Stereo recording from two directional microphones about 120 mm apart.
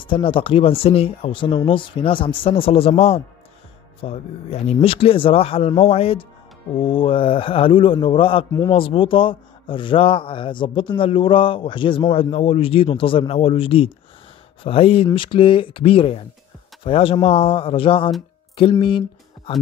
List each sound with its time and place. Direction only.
0.0 s speech: 45° left (ahead or behind)